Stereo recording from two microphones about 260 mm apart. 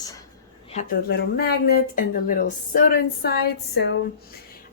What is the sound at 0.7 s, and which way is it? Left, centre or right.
Speech, left.